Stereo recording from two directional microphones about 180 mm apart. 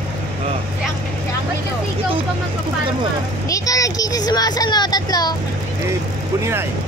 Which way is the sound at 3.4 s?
20° left (ahead or behind).